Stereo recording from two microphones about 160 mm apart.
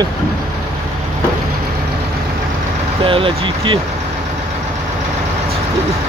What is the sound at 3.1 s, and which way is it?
Speech, 35° right (ahead or behind).